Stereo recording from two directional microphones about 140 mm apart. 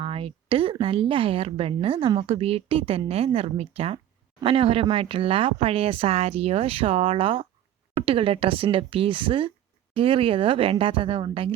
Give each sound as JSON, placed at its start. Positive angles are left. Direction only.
{"t": 0.0, "sound": "speech", "side_deg": -40}